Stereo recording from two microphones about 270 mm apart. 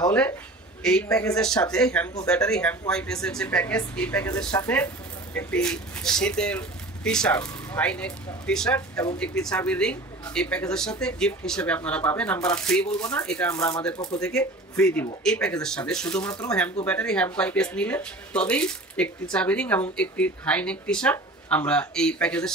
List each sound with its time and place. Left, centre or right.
0.8 s speech: centre
9.2 s speech: centre
13.9 s speech: centre
14.2 s speech: centre